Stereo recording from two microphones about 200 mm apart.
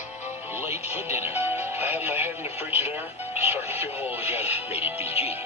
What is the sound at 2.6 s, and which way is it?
Speech, 30° left (ahead or behind).